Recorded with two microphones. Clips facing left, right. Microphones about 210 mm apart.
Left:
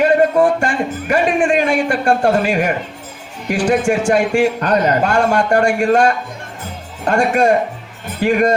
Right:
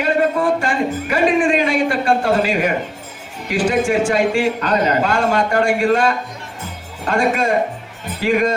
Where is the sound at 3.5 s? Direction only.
45° left (ahead or behind).